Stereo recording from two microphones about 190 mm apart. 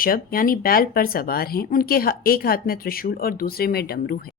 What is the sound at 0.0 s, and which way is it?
A woman's voice, 50° left (ahead or behind).